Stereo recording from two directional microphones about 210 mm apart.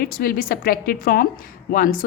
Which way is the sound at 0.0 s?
45° left (ahead or behind).